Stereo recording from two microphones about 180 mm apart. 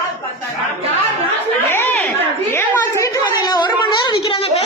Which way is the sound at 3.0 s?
20° left (ahead or behind).